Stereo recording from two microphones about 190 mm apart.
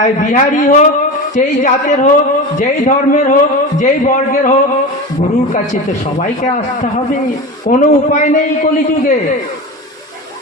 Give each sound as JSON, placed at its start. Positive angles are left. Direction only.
{"t": 0.0, "sound": "a man's voice", "side_deg": 45}
{"t": 5.7, "sound": "a man's voice", "side_deg": 40}
{"t": 7.7, "sound": "a man's voice", "side_deg": 40}